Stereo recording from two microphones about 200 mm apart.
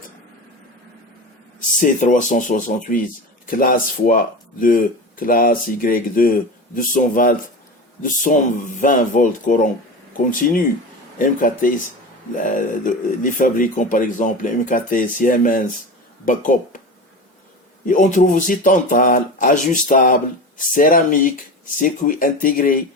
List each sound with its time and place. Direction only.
1.7 s speech: 40° left (ahead or behind)
17.8 s speech: 40° left (ahead or behind)